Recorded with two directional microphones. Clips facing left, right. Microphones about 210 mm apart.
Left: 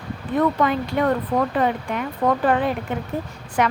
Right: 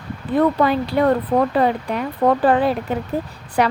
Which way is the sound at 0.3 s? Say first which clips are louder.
Right 3 dB; 35° right (ahead or behind).